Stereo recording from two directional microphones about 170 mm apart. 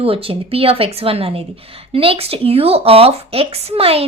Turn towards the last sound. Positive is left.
turn(degrees=-35)  # may be behind; listen again after turning